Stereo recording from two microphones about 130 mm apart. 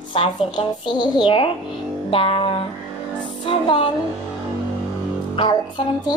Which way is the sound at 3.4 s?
40° left (ahead or behind).